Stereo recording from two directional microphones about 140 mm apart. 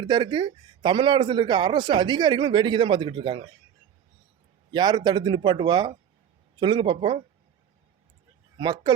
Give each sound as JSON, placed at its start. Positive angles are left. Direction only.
{"t": 0.0, "sound": "a man's voice", "side_deg": -35}
{"t": 4.7, "sound": "a man's voice", "side_deg": -30}
{"t": 8.5, "sound": "speech", "side_deg": -30}